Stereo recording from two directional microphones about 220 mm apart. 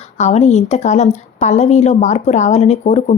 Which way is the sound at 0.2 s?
30° left (ahead or behind).